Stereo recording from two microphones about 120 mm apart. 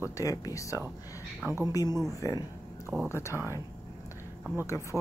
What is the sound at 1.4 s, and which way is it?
Speech, 25° right (ahead or behind).